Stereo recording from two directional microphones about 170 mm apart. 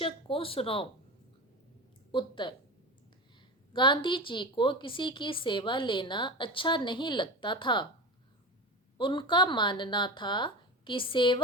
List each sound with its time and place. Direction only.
0.0 s speech: 30° left (ahead or behind)
2.1 s a woman's voice: 30° left (ahead or behind)
3.7 s a woman's voice: 30° left (ahead or behind)
9.0 s a woman's voice: 30° left (ahead or behind)